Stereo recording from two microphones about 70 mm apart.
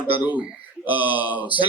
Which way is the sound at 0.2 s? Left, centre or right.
Right.